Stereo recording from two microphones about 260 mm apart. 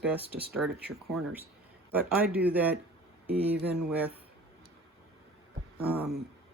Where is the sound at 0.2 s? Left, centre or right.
Right.